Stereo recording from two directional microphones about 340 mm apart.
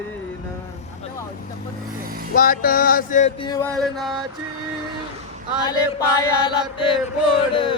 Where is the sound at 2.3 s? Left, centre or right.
Left.